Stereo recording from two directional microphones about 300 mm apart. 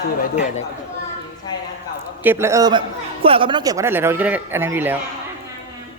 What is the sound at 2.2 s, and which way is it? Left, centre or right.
A man's voice, centre.